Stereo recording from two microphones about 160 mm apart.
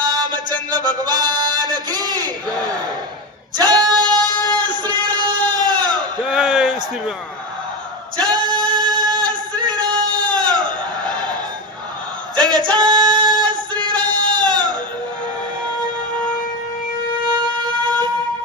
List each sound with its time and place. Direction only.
0.0 s music: 25° right (ahead or behind)
3.6 s a sound: 25° right (ahead or behind)
5.5 s crowd: 25° right (ahead or behind)
6.2 s a sound: centre (ahead or behind)
8.2 s music: 25° right (ahead or behind)
11.0 s fowl: 25° right (ahead or behind)
12.4 s music: 25° right (ahead or behind)